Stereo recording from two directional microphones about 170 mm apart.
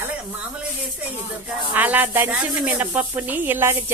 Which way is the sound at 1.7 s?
10° right (ahead or behind).